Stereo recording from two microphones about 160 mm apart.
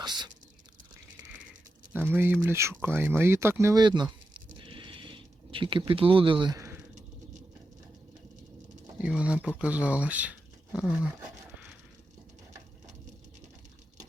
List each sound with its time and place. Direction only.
0.0 s whispering: 25° right (ahead or behind)
1.9 s speech: 10° right (ahead or behind)
9.0 s speech: 5° right (ahead or behind)